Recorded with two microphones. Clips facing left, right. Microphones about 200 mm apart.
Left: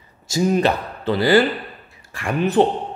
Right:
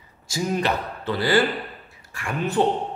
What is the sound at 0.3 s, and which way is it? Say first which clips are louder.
Speech: left 6 dB; 30° left (ahead or behind).